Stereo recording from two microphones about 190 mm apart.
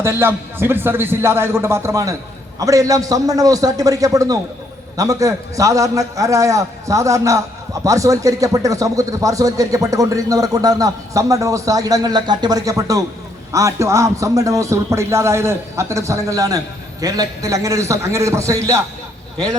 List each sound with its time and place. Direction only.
0.0 s a man's voice: 10° right (ahead or behind)